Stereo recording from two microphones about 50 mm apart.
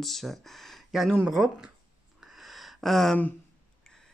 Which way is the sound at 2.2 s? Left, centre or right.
Centre.